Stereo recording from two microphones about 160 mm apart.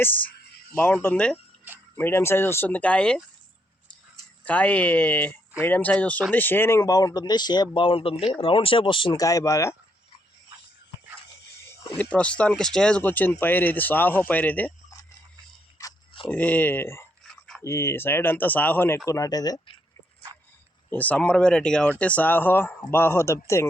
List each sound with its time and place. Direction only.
0.0 s speech: 10° left (ahead or behind)
4.4 s speech: 10° left (ahead or behind); by 8.1 s 35° left (ahead or behind)
8.1 s speech: 5° right (ahead or behind)
8.4 s speech: 35° left (ahead or behind)
11.9 s speech: 5° left (ahead or behind)
15.8 s a sound: 20° left (ahead or behind)
16.3 s speech: 10° left (ahead or behind)
17.2 s a sound: 5° left (ahead or behind)
17.6 s speech: 15° left (ahead or behind)
20.9 s speech: 10° left (ahead or behind)